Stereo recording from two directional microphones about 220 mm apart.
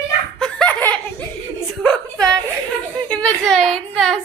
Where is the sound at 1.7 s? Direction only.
5° left (ahead or behind).